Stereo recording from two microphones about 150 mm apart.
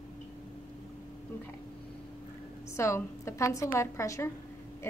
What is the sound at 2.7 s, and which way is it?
A woman's voice, 20° left (ahead or behind).